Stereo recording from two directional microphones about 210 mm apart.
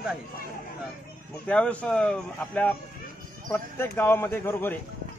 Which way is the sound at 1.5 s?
5° left (ahead or behind).